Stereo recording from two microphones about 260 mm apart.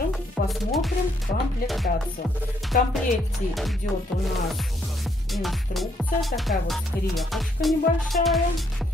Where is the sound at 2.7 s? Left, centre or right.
Left.